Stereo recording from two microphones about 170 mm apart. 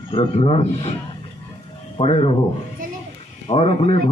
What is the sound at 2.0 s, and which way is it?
Speech, 35° left (ahead or behind).